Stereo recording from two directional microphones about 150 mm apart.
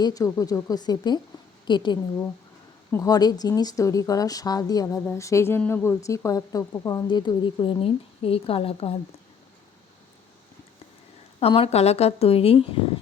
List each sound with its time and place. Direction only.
0.0 s speech: 25° left (ahead or behind); by 9.0 s 40° left (ahead or behind)
11.3 s speech: 40° left (ahead or behind)